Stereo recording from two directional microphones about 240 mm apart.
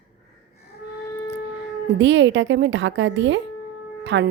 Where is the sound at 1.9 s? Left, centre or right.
Right.